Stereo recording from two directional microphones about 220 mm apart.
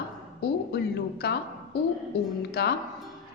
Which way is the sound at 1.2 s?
50° left (ahead or behind).